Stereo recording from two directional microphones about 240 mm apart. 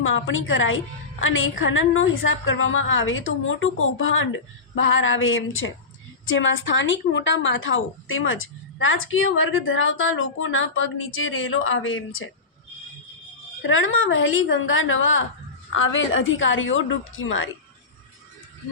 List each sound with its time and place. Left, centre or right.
0.0 s a woman's voice: left
13.6 s a woman's voice: left